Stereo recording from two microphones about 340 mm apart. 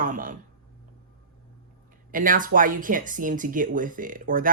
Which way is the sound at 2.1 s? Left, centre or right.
Right.